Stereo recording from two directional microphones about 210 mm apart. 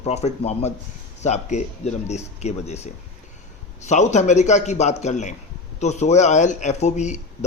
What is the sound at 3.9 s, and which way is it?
A man's voice, 35° left (ahead or behind).